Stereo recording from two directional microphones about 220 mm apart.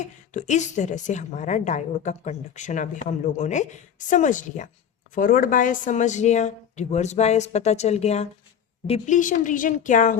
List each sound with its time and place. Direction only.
0.0 s a woman's voice: 35° left (ahead or behind)